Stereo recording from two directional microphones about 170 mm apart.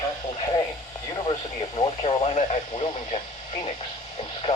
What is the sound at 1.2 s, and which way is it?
Speech, 30° left (ahead or behind).